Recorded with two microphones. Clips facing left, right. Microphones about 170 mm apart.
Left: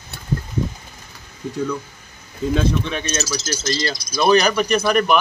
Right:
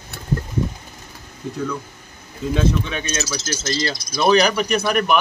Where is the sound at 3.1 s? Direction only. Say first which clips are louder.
Left 1 dB; 35° left (ahead or behind).